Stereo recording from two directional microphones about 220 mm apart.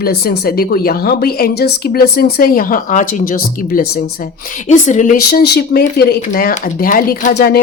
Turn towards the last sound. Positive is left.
turn(degrees=45)  # may be behind; listen again after turning